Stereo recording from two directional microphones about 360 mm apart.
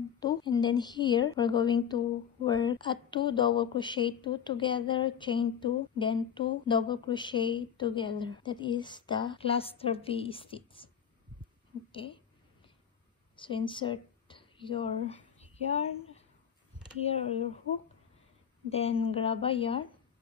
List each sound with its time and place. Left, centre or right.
0.2 s a woman's voice: centre
11.9 s a woman's voice: centre
13.4 s speech: centre
17.0 s a woman's voice: centre
18.7 s a woman's voice: centre